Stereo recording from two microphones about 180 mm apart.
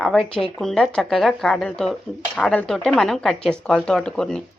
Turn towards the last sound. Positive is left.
turn(degrees=5)  # may be behind; listen again after turning